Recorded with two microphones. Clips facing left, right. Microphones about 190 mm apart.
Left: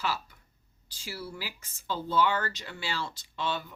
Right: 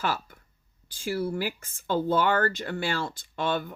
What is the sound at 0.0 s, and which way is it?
Speech, 50° right (ahead or behind).